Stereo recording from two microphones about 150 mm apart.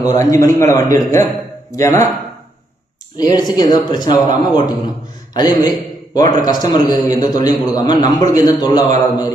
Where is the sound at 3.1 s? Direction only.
25° left (ahead or behind).